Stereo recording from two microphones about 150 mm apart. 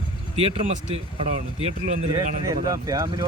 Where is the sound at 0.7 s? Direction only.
50° right (ahead or behind).